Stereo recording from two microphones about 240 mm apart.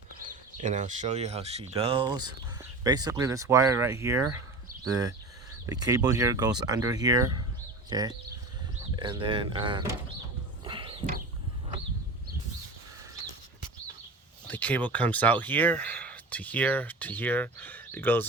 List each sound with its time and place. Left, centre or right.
0.2 s speech: right
10.6 s a sound: right
14.4 s speech: centre